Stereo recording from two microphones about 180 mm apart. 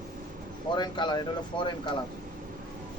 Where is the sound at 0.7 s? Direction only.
25° left (ahead or behind).